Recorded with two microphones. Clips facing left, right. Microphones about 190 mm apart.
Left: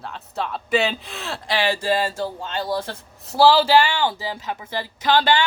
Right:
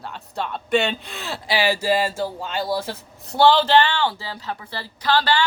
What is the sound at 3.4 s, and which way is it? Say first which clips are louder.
Speech: left 1 dB; 5° left (ahead or behind).